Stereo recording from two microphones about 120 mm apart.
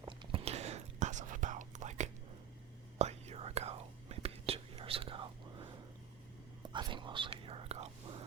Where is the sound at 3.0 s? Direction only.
65° right (ahead or behind); by 5.6 s 45° right (ahead or behind).